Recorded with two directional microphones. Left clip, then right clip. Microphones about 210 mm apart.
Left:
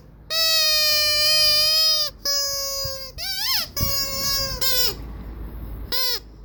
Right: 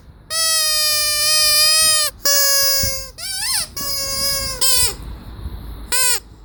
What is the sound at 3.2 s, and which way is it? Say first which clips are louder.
Rodents: left 1 dB; 10° left (ahead or behind).